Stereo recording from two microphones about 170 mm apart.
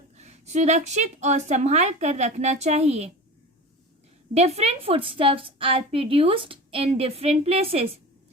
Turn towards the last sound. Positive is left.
turn(degrees=-35)  # may be behind; listen again after turning